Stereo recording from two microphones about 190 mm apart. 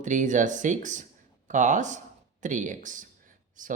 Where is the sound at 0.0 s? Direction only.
40° right (ahead or behind).